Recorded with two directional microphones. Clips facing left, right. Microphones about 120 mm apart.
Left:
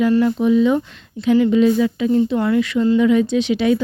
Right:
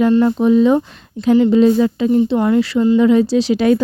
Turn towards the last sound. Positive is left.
turn(degrees=-45)  # may be behind; listen again after turning